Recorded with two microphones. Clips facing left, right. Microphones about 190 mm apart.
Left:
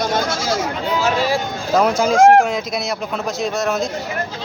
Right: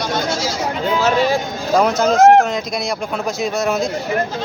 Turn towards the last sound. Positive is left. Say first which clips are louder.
# right 1 dB
turn(degrees=0)  # may be behind; listen again after turning